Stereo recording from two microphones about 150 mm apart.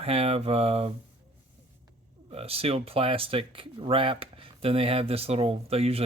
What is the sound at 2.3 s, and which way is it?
Speech, 40° right (ahead or behind).